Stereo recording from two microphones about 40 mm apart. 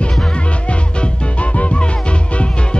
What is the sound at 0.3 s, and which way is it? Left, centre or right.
Music, left.